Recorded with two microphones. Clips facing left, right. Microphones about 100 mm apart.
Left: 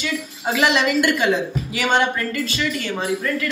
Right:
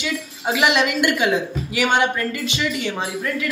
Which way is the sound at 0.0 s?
10° right (ahead or behind).